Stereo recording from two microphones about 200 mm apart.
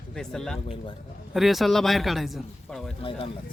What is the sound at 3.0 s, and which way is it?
Speech, 25° left (ahead or behind).